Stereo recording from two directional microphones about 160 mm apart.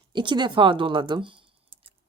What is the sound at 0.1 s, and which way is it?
Speech, 30° right (ahead or behind).